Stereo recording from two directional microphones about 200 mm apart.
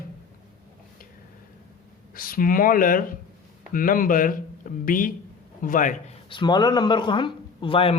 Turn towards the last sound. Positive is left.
turn(degrees=25)  # may be behind; listen again after turning